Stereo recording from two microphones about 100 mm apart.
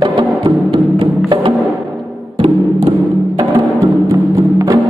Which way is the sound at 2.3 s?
70° right (ahead or behind).